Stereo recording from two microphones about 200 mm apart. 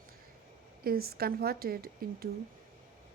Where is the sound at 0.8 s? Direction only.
50° right (ahead or behind).